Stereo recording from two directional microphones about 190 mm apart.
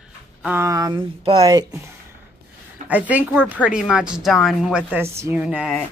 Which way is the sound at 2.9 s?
10° right (ahead or behind).